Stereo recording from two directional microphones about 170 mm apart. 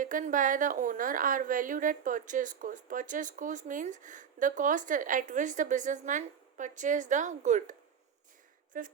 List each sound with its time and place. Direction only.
0.0 s a woman's voice: 50° right (ahead or behind)